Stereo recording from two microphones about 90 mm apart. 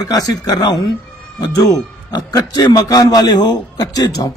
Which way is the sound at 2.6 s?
40° left (ahead or behind).